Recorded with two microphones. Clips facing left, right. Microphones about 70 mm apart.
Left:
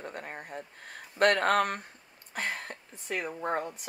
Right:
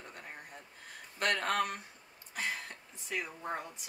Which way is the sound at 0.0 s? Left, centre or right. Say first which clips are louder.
Left 8 dB; left.